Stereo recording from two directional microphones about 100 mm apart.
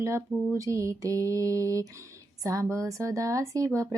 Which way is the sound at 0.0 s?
30° right (ahead or behind).